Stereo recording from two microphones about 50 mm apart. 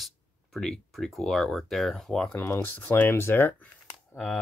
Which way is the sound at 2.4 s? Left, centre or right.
Left.